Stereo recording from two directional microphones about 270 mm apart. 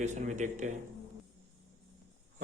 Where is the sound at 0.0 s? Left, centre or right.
Right.